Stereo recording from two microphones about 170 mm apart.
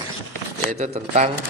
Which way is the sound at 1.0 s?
40° right (ahead or behind).